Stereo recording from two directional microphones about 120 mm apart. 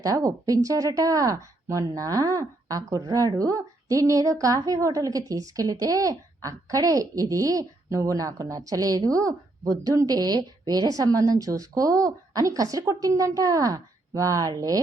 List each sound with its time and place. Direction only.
0.0 s a woman's voice: 30° right (ahead or behind)